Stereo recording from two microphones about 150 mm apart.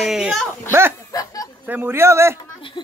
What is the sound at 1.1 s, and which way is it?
Chuckle, 25° left (ahead or behind).